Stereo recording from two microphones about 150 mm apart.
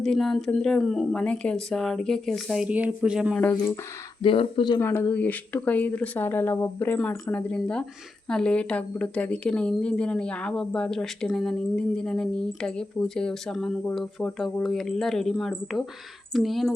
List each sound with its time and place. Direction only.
0.0 s a woman's voice: 5° left (ahead or behind)
3.3 s a woman's voice: 5° left (ahead or behind)
4.2 s speech: 35° left (ahead or behind)
4.8 s a woman's voice: 15° left (ahead or behind); by 16.7 s centre (ahead or behind)